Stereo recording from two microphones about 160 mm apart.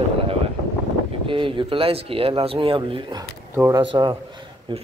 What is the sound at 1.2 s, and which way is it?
Speech, 30° right (ahead or behind).